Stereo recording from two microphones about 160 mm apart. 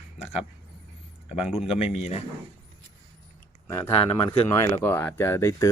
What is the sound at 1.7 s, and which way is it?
Speech, 40° left (ahead or behind).